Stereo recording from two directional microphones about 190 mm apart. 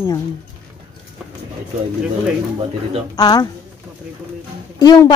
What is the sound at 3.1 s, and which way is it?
Speech, 20° left (ahead or behind).